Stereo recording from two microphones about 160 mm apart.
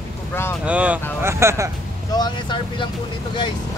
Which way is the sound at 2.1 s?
25° left (ahead or behind).